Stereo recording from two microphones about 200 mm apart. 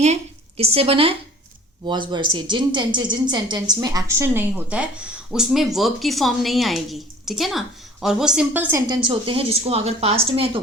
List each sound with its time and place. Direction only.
0.0 s a woman's voice: 30° right (ahead or behind); by 8.8 s 10° right (ahead or behind)
8.9 s a woman's voice: 25° right (ahead or behind)